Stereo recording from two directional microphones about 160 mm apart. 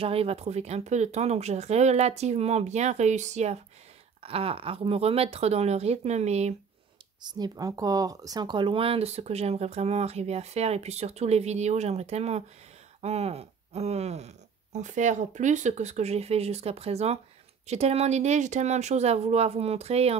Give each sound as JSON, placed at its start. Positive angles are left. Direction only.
{"t": 0.0, "sound": "speech", "side_deg": -40}
{"t": 7.2, "sound": "speech", "side_deg": -25}